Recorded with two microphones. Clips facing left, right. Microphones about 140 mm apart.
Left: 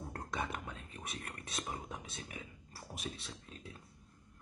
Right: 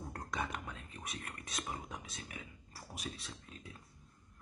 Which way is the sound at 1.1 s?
30° left (ahead or behind).